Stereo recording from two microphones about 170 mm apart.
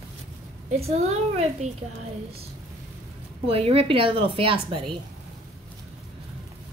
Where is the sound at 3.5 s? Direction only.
35° right (ahead or behind).